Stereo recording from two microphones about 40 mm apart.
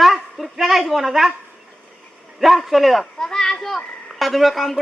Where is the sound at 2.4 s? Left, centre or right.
Centre.